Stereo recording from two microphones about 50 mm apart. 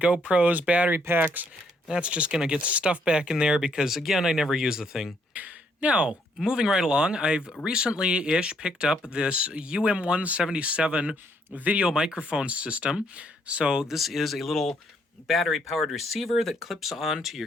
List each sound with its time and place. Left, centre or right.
0.0 s a man's voice: right
0.9 s speech: right
1.9 s a man's voice: right
3.8 s speech: centre
5.3 s a sound: right
6.4 s a man's voice: centre; by 11.9 s right
11.9 s a man's voice: centre
13.9 s speech: centre